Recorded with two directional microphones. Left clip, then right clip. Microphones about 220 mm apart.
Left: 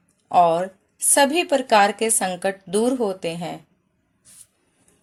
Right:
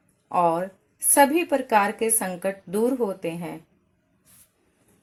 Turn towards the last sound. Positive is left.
turn(degrees=50)  # may be behind; listen again after turning